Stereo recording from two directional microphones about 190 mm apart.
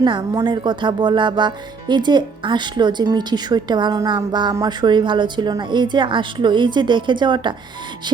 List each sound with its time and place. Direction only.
0.0 s speech: 20° right (ahead or behind)